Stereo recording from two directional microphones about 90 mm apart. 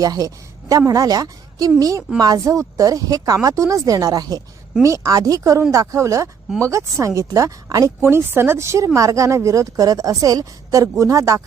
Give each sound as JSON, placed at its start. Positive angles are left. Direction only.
{"t": 0.0, "sound": "a woman's voice", "side_deg": -45}
{"t": 8.0, "sound": "speech", "side_deg": -25}